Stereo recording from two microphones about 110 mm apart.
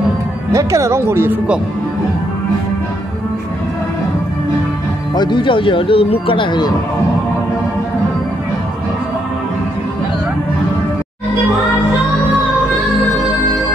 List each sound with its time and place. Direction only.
0.5 s speech: 30° right (ahead or behind)
5.1 s speech: 45° left (ahead or behind)